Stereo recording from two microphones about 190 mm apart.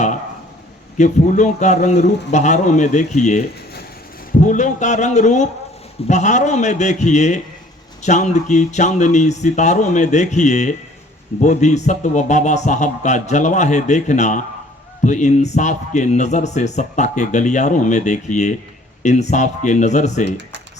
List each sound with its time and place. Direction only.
0.9 s speech: 40° left (ahead or behind)